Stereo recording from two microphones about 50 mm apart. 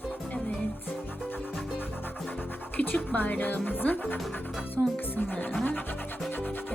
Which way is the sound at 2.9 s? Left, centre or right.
Left.